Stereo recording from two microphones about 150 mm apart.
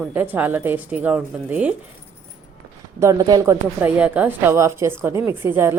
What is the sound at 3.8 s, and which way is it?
A woman's voice, 10° right (ahead or behind).